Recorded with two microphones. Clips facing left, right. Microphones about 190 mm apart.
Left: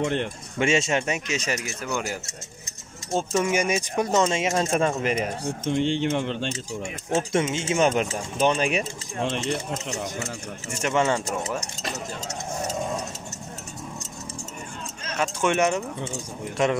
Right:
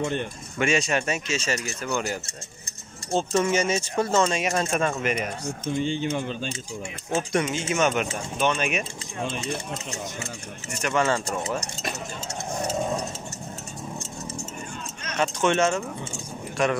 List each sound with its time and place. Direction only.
0.0 s speech: 80° left
0.6 s speech: 25° left (ahead or behind)
3.1 s speech: 10° left (ahead or behind); by 5.5 s 30° left (ahead or behind)
5.7 s speech: 75° left (ahead or behind)
7.2 s speech: 25° left (ahead or behind)
9.2 s speech: 85° left
10.8 s speech: 20° left (ahead or behind)
15.1 s speech: 10° left (ahead or behind)